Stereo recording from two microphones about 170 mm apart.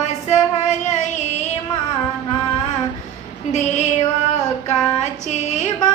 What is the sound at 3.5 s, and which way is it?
Female singing, 40° left (ahead or behind).